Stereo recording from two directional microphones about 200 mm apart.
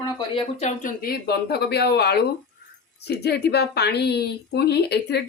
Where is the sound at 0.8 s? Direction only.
45° left (ahead or behind).